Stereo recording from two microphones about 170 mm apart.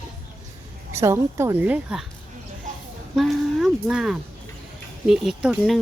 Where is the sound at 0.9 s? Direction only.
15° right (ahead or behind).